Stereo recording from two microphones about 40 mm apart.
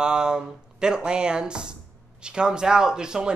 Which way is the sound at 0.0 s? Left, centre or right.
Right.